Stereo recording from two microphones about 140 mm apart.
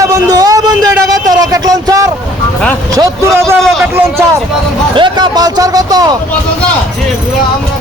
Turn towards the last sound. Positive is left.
turn(degrees=-25)  # may be behind; listen again after turning